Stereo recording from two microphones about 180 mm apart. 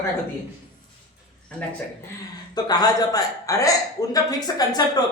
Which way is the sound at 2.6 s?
20° left (ahead or behind).